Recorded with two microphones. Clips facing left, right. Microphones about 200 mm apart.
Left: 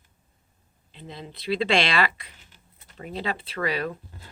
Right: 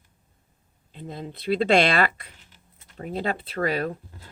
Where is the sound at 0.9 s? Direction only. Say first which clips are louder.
Right 4 dB; 45° right (ahead or behind).